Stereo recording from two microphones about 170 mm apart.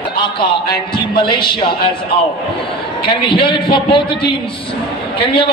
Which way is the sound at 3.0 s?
30° left (ahead or behind).